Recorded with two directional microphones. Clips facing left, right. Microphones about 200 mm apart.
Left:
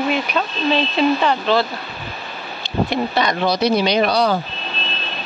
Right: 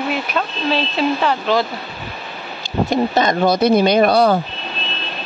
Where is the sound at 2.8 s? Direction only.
45° right (ahead or behind).